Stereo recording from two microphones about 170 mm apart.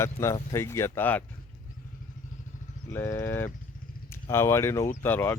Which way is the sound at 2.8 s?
15° left (ahead or behind).